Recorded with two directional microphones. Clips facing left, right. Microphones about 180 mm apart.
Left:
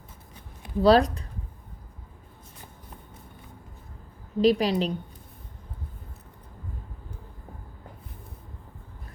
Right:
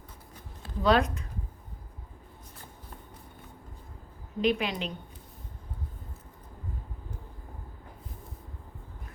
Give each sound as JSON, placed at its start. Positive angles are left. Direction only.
{"t": 0.8, "sound": "a woman's voice", "side_deg": 35}
{"t": 4.4, "sound": "a woman's voice", "side_deg": 35}